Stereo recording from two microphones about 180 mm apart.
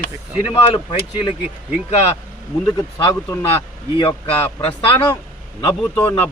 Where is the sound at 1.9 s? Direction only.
35° left (ahead or behind).